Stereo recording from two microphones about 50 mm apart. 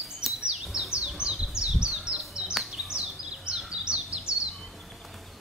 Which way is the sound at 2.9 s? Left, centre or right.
Centre.